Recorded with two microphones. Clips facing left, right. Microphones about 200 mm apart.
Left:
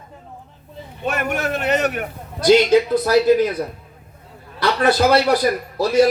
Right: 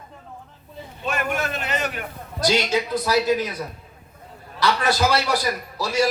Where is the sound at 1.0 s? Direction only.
65° left (ahead or behind).